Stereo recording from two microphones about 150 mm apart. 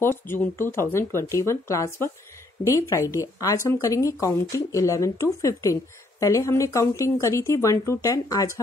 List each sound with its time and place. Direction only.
0.0 s a woman's voice: 15° left (ahead or behind)